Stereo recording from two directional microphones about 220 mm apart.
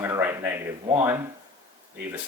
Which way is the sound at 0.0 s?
10° right (ahead or behind).